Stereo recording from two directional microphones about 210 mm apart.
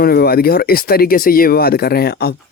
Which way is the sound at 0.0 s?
45° left (ahead or behind).